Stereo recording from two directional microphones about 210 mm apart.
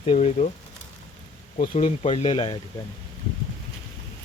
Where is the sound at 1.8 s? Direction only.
30° left (ahead or behind).